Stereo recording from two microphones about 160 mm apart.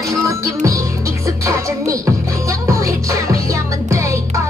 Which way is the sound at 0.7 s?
20° right (ahead or behind).